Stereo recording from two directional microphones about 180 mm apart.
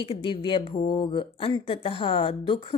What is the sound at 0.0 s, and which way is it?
A woman's voice, 30° left (ahead or behind).